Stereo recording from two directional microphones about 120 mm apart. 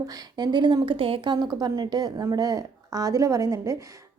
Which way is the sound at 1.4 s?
35° right (ahead or behind).